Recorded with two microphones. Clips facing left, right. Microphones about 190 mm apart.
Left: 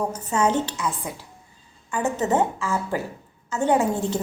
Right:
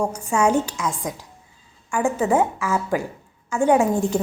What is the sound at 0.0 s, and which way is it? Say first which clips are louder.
A woman's voice: right 2 dB; 10° right (ahead or behind).